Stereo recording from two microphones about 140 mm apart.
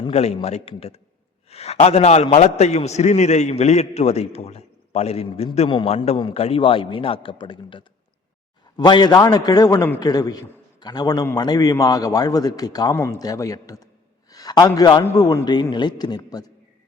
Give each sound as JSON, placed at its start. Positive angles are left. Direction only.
{"t": 0.1, "sound": "a man's voice", "side_deg": 50}
{"t": 5.6, "sound": "a man's voice", "side_deg": 35}
{"t": 6.3, "sound": "a man's voice", "side_deg": 45}